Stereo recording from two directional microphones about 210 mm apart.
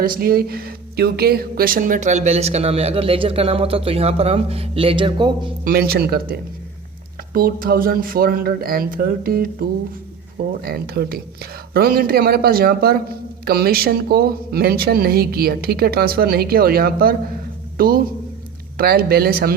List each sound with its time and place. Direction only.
0.0 s speech: 45° right (ahead or behind); by 5.3 s 25° right (ahead or behind)
5.6 s a man's voice: 45° right (ahead or behind)